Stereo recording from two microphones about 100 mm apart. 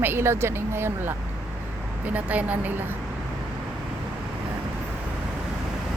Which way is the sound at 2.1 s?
15° right (ahead or behind).